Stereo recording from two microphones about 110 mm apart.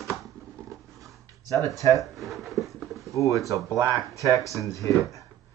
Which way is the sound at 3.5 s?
30° right (ahead or behind).